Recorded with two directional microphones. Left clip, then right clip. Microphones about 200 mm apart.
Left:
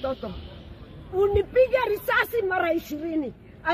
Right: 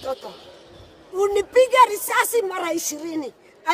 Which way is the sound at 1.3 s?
25° right (ahead or behind).